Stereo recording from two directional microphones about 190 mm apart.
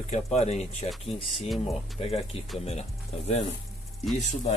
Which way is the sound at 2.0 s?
30° left (ahead or behind).